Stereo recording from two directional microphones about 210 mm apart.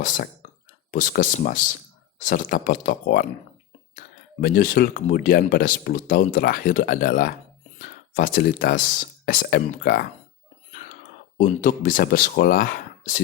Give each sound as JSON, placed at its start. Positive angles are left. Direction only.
{"t": 0.0, "sound": "speech", "side_deg": 40}
{"t": 11.4, "sound": "speech", "side_deg": 40}